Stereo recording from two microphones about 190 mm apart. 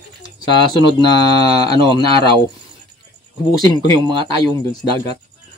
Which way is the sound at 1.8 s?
25° right (ahead or behind).